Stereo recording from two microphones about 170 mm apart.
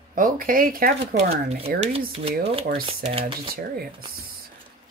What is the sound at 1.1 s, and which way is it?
Speech, 40° right (ahead or behind).